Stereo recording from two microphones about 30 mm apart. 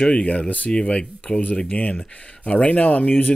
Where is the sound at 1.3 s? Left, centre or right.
Left.